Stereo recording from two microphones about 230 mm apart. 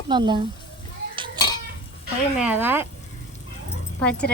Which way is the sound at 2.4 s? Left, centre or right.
Centre.